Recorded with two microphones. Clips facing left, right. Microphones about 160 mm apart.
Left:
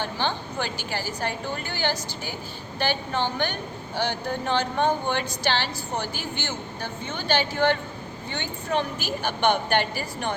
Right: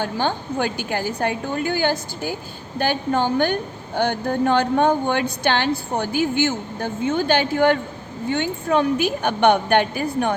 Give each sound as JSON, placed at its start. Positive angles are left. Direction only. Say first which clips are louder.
{"t": 0.0, "sound": "a woman's voice", "louder": "right 5 dB", "side_deg": -45}